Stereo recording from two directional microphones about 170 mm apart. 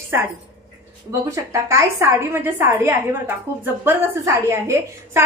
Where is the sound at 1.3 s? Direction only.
15° right (ahead or behind).